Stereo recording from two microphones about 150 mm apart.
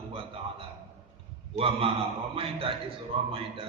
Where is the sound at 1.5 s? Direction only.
40° right (ahead or behind).